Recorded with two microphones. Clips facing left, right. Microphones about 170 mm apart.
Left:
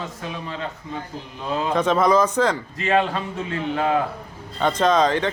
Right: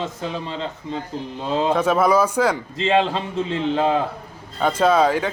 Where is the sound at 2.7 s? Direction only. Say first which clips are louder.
Right 2 dB; 25° right (ahead or behind).